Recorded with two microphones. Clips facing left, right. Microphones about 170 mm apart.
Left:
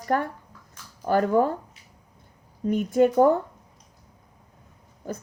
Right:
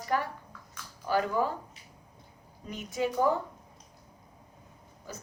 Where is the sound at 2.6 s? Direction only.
55° left (ahead or behind).